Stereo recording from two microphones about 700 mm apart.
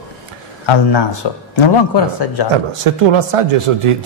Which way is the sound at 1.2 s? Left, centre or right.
Left.